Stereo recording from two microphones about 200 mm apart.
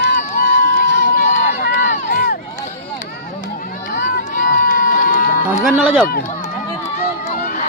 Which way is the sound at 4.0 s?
40° left (ahead or behind).